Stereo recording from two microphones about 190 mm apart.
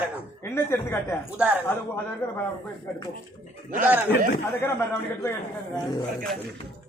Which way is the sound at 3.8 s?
10° right (ahead or behind).